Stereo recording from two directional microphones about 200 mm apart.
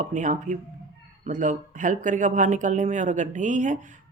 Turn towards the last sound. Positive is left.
turn(degrees=-35)  # may be behind; listen again after turning